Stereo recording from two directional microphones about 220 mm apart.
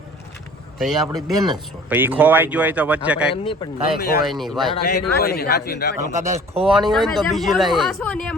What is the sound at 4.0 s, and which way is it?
Speech, 45° left (ahead or behind).